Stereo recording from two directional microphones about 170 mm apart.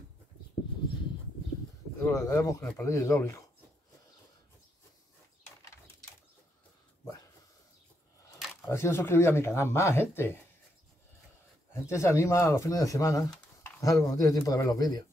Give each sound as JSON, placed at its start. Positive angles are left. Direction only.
{"t": 2.0, "sound": "speech", "side_deg": 20}
{"t": 8.6, "sound": "speech", "side_deg": 15}
{"t": 11.8, "sound": "speech", "side_deg": 15}